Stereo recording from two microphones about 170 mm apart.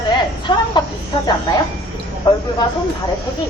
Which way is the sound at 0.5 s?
25° left (ahead or behind).